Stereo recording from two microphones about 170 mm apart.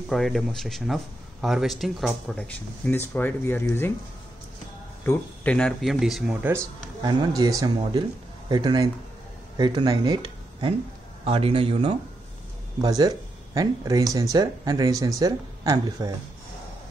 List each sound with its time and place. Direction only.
0.1 s speech: centre (ahead or behind)
5.0 s speech: 10° left (ahead or behind)
6.5 s speech: 20° right (ahead or behind)
12.8 s speech: 20° right (ahead or behind)